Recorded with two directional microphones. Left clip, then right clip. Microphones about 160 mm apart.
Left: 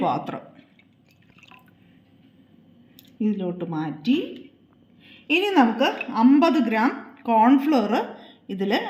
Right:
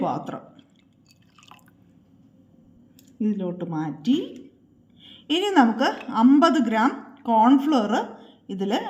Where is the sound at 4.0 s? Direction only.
25° right (ahead or behind).